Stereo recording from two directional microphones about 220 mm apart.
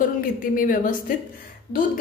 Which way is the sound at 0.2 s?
40° left (ahead or behind).